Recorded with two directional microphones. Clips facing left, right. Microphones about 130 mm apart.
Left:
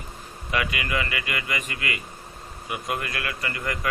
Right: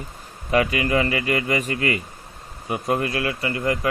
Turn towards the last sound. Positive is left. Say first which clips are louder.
# right 7 dB
turn(degrees=-30)  # may be behind; listen again after turning